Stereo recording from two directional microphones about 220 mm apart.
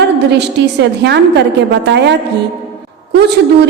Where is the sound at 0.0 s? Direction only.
50° right (ahead or behind).